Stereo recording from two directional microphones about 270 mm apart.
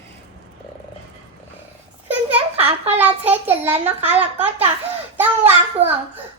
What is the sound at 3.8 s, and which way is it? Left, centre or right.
Speech, right.